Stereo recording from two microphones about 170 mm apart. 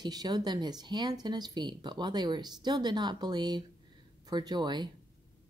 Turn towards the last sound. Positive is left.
turn(degrees=-25)  # may be behind; listen again after turning